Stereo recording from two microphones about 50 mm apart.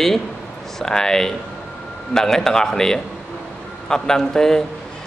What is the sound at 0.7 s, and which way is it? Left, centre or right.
A man's voice, centre.